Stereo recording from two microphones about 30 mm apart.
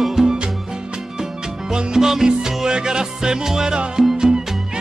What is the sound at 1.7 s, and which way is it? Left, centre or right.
Music, centre.